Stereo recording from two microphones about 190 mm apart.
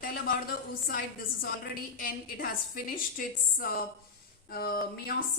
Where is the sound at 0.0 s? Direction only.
50° left (ahead or behind).